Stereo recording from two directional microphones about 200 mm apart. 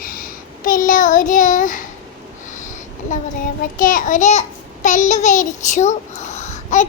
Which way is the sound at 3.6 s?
45° left (ahead or behind).